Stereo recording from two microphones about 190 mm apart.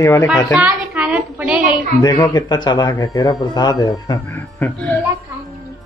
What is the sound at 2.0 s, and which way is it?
Speech, 20° left (ahead or behind).